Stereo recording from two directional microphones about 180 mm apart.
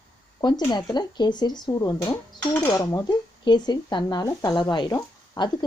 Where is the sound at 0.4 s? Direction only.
25° left (ahead or behind).